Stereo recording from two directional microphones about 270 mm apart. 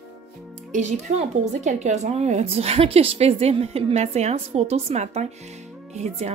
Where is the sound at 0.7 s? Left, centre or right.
Right.